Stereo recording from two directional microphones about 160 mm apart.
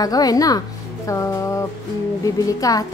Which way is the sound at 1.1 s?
20° left (ahead or behind).